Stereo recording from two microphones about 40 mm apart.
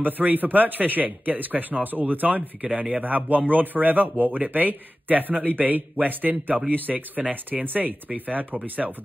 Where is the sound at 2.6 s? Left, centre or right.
Right.